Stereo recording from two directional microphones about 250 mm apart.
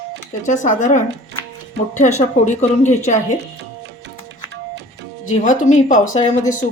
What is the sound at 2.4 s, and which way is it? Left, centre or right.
Speech, left.